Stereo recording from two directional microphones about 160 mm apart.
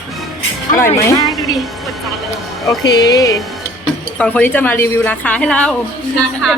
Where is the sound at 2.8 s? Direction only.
25° left (ahead or behind).